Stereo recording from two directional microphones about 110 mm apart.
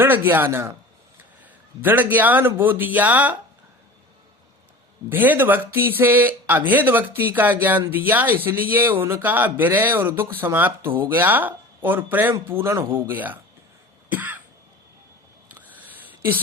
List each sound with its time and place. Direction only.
0.0 s speech: 20° right (ahead or behind)
1.8 s speech: 15° right (ahead or behind)
5.0 s speech: 15° right (ahead or behind)
14.1 s cough: 15° right (ahead or behind)
15.5 s a sound: 15° right (ahead or behind)